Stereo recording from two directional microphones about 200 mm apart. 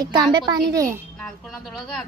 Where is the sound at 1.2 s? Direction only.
5° left (ahead or behind).